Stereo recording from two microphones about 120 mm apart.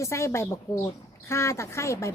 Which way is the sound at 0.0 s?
25° left (ahead or behind).